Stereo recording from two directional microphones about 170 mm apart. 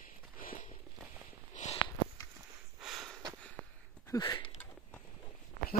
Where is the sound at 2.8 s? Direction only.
Centre (ahead or behind).